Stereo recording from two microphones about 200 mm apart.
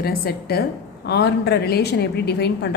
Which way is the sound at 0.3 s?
50° left (ahead or behind).